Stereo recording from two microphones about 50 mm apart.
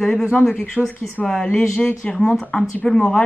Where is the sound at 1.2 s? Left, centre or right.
Centre.